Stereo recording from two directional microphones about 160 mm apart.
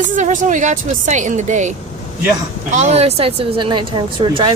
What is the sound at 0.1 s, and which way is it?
Speech, 55° right (ahead or behind).